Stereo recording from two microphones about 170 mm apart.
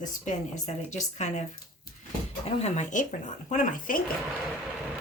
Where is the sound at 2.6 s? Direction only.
40° left (ahead or behind).